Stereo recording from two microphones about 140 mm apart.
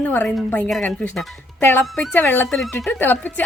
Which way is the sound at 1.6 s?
15° left (ahead or behind).